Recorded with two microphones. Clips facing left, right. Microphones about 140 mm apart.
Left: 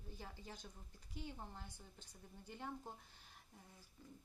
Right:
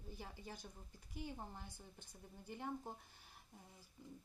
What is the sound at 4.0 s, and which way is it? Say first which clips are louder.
Speech: right 3 dB; 15° right (ahead or behind).